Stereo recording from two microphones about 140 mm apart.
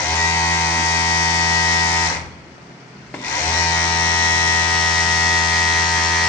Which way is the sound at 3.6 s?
15° left (ahead or behind).